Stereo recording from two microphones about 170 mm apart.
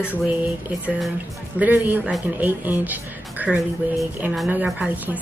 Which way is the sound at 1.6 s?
10° right (ahead or behind).